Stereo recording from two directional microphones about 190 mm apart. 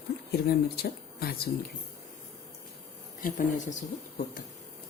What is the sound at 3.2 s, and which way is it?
Speech, 45° left (ahead or behind).